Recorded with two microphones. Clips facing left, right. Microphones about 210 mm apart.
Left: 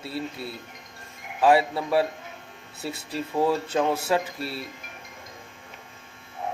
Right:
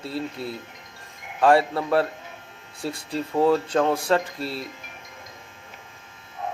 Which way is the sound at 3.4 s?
5° left (ahead or behind).